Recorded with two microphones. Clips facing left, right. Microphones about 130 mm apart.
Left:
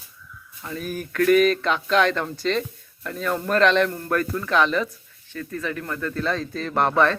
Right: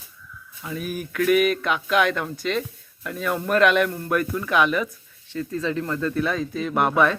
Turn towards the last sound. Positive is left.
turn(degrees=-10)  # may be behind; listen again after turning